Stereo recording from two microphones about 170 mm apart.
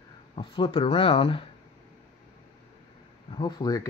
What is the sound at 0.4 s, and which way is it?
Speech, 30° left (ahead or behind).